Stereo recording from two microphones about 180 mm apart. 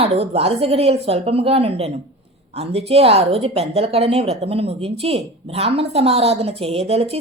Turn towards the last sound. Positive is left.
turn(degrees=-35)  # may be behind; listen again after turning